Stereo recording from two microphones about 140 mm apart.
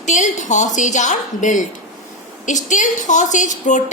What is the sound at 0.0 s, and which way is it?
A woman's voice, 60° left (ahead or behind).